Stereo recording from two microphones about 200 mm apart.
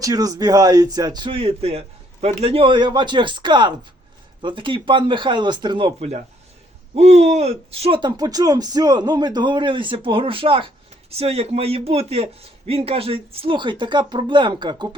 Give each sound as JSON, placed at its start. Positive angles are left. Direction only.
{"t": 0.0, "sound": "speech", "side_deg": -20}